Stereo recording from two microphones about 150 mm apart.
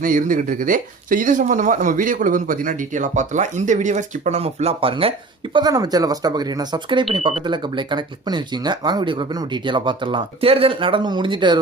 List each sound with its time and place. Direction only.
0.0 s speech: 65° right (ahead or behind); by 5.1 s 35° right (ahead or behind)
5.5 s speech: 25° right (ahead or behind)